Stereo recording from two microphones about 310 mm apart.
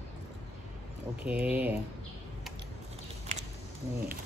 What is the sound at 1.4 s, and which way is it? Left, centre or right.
Speech, centre.